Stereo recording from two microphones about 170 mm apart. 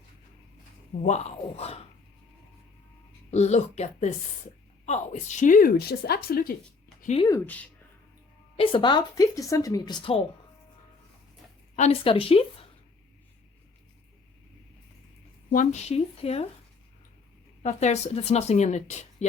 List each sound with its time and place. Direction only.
1.0 s speech: 40° left (ahead or behind)
3.3 s a woman's voice: 40° left (ahead or behind); by 6.5 s 60° left (ahead or behind)
7.3 s speech: 10° left (ahead or behind)
8.5 s speech: 30° left (ahead or behind)
11.8 s speech: 35° left (ahead or behind)
15.5 s speech: 45° left (ahead or behind)
17.6 s speech: 40° left (ahead or behind)